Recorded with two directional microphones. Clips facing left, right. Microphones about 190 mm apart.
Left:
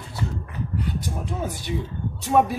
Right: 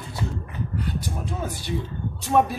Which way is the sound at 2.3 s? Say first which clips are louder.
Left 1 dB; 5° left (ahead or behind).